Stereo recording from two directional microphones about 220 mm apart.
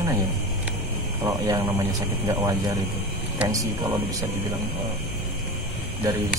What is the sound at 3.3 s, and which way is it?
Speech, 15° right (ahead or behind).